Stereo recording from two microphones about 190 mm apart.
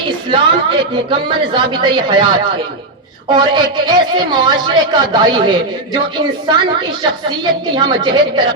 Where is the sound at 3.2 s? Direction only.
25° right (ahead or behind).